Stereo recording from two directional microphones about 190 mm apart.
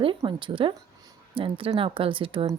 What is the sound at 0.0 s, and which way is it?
A woman's voice, 25° right (ahead or behind).